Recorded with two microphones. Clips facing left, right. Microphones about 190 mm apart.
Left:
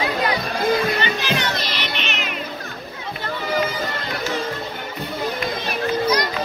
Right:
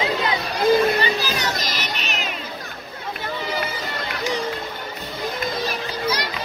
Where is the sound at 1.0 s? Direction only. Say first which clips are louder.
Left 1 dB; 40° right (ahead or behind).